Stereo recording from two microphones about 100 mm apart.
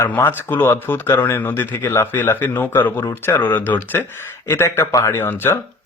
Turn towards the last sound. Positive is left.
turn(degrees=20)  # may be behind; listen again after turning